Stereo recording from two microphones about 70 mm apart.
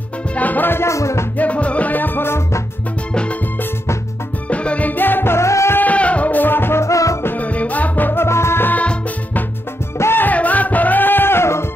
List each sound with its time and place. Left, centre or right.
0.4 s music: left
0.9 s music: left
1.4 s music: centre; by 2.6 s left
4.5 s music: centre; by 5.8 s left
5.8 s music: centre; by 7.2 s left
7.2 s music: left
8.7 s music: left
9.9 s music: left
10.2 s music: left